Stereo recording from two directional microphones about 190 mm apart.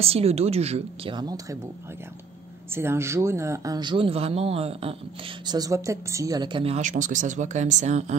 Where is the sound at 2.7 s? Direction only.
10° right (ahead or behind); by 4.9 s 30° right (ahead or behind).